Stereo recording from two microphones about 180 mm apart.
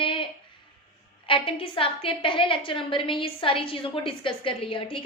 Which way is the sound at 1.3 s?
30° left (ahead or behind).